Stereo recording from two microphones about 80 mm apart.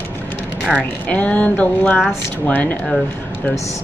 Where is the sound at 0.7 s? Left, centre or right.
Centre.